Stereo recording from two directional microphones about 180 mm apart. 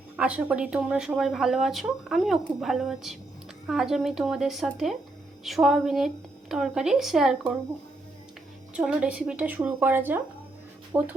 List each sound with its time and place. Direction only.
0.2 s speech: 5° right (ahead or behind)
8.7 s speech: 5° right (ahead or behind)